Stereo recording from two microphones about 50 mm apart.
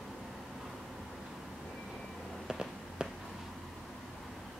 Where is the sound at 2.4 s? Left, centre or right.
Centre.